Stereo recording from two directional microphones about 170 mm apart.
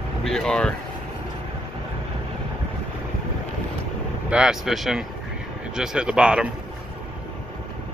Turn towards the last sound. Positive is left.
turn(degrees=-5)  # may be behind; listen again after turning